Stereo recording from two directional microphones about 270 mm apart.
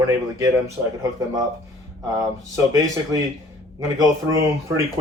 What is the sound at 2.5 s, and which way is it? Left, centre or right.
Speech, centre.